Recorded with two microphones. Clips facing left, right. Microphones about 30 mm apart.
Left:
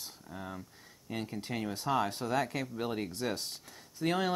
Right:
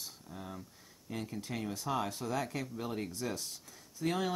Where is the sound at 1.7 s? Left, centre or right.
Left.